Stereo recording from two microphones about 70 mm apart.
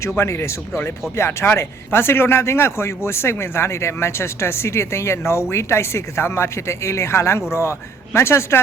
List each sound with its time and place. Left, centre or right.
0.2 s speech: left